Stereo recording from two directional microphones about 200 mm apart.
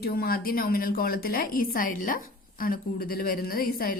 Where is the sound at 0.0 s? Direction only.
50° left (ahead or behind).